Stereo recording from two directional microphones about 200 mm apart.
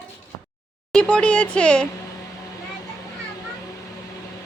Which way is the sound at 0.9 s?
5° left (ahead or behind).